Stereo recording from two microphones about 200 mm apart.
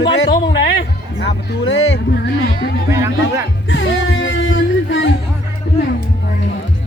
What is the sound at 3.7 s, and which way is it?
Music, 70° left (ahead or behind).